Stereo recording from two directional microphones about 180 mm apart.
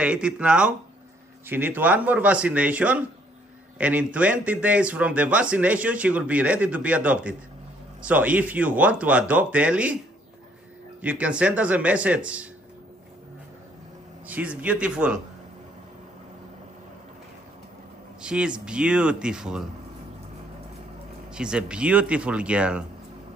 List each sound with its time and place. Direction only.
0.0 s a man's voice: 5° right (ahead or behind)
11.0 s a man's voice: 5° right (ahead or behind)
14.2 s a man's voice: 10° right (ahead or behind)
18.2 s speech: 5° right (ahead or behind)
21.3 s a man's voice: 5° right (ahead or behind)